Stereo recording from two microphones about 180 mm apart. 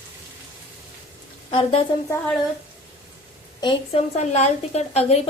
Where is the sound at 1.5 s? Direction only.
35° left (ahead or behind).